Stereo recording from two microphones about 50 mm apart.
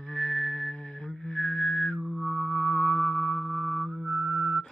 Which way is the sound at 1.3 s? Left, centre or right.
Centre.